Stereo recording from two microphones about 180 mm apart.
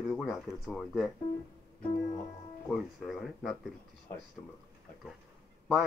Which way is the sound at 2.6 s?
Centre (ahead or behind).